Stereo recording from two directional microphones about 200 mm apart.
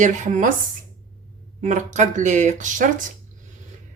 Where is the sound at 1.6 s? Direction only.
35° right (ahead or behind).